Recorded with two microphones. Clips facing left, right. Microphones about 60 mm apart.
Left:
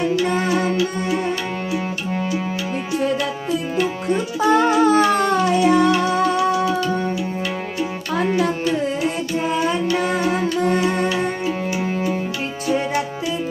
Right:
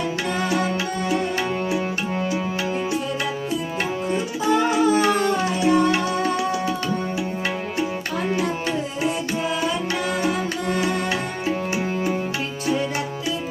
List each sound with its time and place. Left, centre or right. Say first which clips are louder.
0.3 s music: left 3 dB; left
4.4 s music: left 4 dB; left
5.6 s music: left 1 dB; left
10.0 s music: left 3 dB; left